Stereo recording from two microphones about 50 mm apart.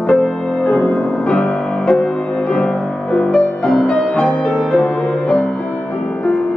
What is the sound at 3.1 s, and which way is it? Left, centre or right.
Music, centre.